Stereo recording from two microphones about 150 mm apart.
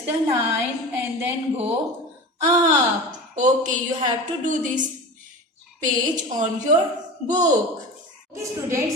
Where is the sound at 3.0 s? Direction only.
55° right (ahead or behind).